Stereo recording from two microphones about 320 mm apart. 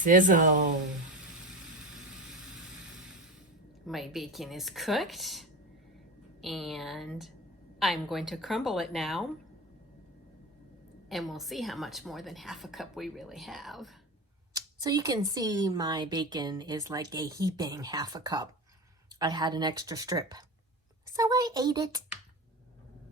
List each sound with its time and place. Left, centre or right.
0.0 s speech: right
2.0 s vehicle: centre
3.8 s a woman's voice: centre
11.1 s a woman's voice: centre
14.5 s speech: centre